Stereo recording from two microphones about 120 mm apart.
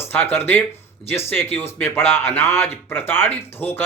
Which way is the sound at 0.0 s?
20° left (ahead or behind).